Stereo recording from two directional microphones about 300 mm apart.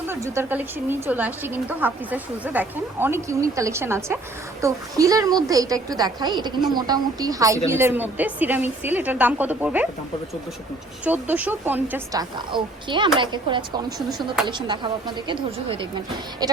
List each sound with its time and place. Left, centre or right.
0.1 s a woman's voice: centre
11.0 s a woman's voice: centre